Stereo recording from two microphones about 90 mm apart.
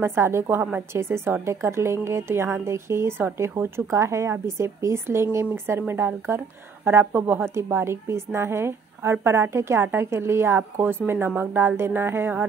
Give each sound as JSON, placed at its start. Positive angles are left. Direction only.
{"t": 0.0, "sound": "a woman's voice", "side_deg": -30}